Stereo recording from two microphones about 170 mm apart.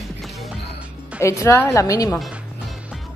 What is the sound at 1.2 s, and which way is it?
A woman's voice, 15° left (ahead or behind).